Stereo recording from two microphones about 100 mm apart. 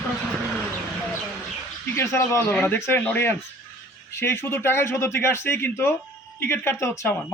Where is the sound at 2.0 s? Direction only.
30° left (ahead or behind).